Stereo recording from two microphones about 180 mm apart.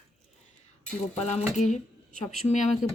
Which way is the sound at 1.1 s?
35° left (ahead or behind).